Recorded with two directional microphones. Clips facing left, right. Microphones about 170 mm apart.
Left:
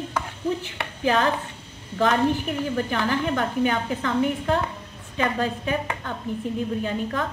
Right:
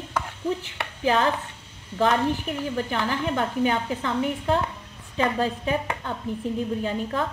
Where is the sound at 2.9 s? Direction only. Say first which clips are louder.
Left 2 dB; 30° right (ahead or behind).